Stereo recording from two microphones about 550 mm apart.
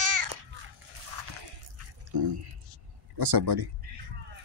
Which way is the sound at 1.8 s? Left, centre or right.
Right.